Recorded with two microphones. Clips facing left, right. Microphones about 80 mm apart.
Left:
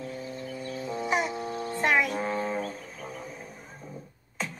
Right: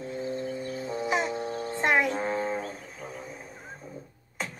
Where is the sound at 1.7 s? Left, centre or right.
Right.